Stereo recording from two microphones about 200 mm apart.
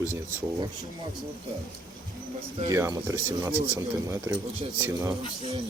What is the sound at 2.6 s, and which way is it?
Speech, 15° right (ahead or behind).